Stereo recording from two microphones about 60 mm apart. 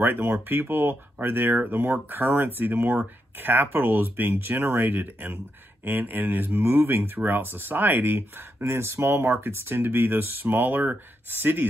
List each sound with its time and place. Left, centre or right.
0.0 s speech: right